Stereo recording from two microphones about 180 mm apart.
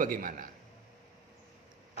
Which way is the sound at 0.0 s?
50° right (ahead or behind).